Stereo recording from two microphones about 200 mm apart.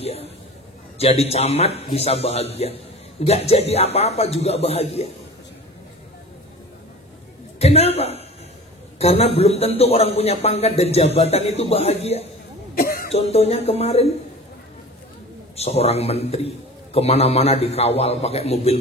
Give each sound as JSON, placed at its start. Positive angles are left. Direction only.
{"t": 0.0, "sound": "a sound", "side_deg": 30}
{"t": 0.9, "sound": "speech", "side_deg": 30}
{"t": 7.5, "sound": "a woman's voice", "side_deg": 30}
{"t": 12.7, "sound": "throat clearing", "side_deg": 45}
{"t": 13.1, "sound": "speech", "side_deg": 30}
{"t": 15.5, "sound": "speech", "side_deg": 30}